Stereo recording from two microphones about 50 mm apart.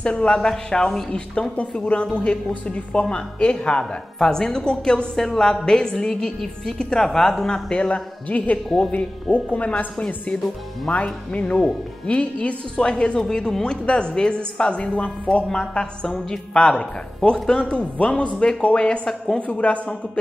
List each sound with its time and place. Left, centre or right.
0.0 s a woman's voice: left
7.9 s a man's voice: left
15.4 s a woman's voice: centre; by 20.0 s left